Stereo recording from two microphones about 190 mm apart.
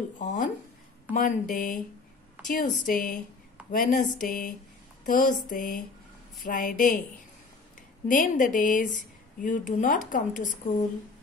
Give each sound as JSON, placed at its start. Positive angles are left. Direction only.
{"t": 0.2, "sound": "speech", "side_deg": 40}
{"t": 8.1, "sound": "speech", "side_deg": 45}